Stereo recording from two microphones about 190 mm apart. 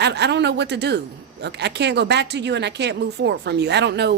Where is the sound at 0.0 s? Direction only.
65° right (ahead or behind).